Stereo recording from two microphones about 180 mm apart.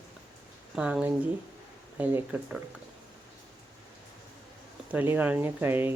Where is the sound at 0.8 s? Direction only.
5° right (ahead or behind).